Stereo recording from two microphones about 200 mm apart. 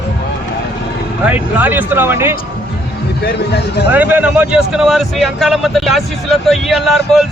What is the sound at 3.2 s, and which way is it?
Speech, 55° left (ahead or behind).